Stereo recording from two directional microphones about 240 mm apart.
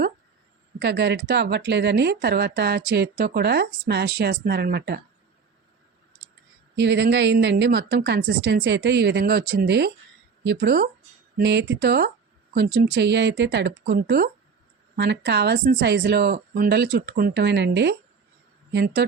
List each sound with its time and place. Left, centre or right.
0.8 s speech: right
6.7 s speech: right